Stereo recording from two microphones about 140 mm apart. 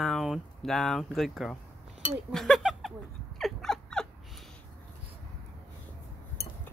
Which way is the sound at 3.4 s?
5° left (ahead or behind).